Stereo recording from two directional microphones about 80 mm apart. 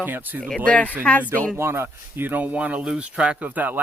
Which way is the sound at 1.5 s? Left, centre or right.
Right.